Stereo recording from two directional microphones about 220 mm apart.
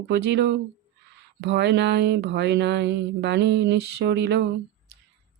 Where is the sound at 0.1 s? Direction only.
50° right (ahead or behind).